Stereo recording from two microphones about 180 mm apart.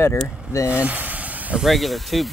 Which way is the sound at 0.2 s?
5° right (ahead or behind).